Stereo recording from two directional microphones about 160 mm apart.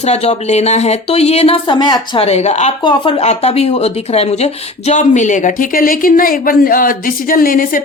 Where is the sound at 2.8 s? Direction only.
30° left (ahead or behind).